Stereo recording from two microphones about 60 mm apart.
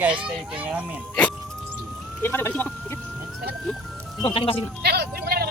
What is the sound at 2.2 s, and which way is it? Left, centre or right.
Speech, left.